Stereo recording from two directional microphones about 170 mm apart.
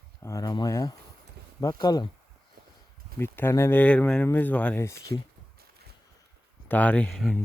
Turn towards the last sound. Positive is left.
turn(degrees=5)  # may be behind; listen again after turning